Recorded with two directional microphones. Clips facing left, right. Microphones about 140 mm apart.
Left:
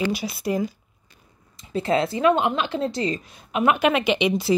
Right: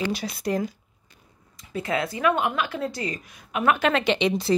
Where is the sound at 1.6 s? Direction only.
30° left (ahead or behind).